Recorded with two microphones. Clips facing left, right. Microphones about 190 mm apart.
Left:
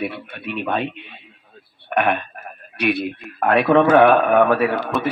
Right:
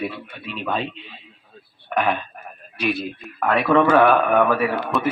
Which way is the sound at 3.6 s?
25° left (ahead or behind).